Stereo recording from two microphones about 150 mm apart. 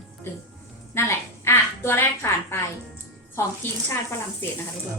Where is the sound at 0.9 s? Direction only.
15° left (ahead or behind).